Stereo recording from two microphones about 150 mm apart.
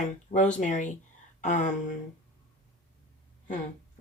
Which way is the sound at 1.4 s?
55° left (ahead or behind).